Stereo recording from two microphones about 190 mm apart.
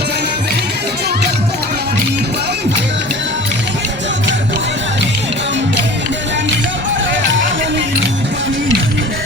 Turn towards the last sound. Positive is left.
turn(degrees=-75)  # may be behind; listen again after turning